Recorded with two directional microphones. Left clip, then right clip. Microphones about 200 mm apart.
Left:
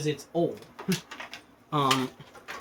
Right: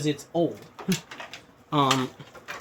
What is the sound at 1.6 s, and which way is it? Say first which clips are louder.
Speech: right 2 dB; 55° right (ahead or behind).